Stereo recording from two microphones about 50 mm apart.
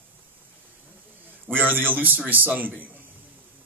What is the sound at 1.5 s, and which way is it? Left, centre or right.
Speech, right.